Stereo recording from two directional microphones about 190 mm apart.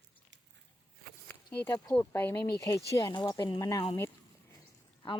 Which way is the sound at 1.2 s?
10° left (ahead or behind).